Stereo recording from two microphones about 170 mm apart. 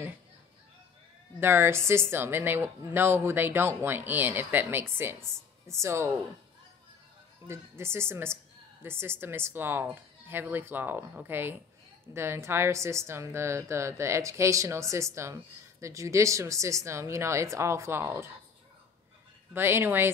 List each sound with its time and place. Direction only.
1.4 s a woman's voice: 15° right (ahead or behind)
7.4 s a woman's voice: 15° right (ahead or behind)
19.5 s a woman's voice: 15° right (ahead or behind)